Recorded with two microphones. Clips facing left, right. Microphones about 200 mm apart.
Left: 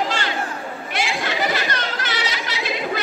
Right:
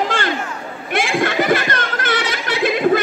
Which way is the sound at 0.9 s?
55° right (ahead or behind).